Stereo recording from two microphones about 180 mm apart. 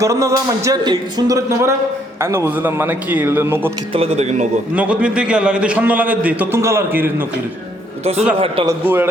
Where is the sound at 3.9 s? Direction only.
35° right (ahead or behind).